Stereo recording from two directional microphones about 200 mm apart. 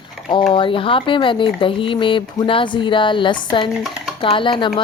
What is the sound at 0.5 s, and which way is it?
Speech, 25° left (ahead or behind).